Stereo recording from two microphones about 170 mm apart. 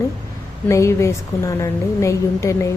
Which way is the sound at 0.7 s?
15° left (ahead or behind).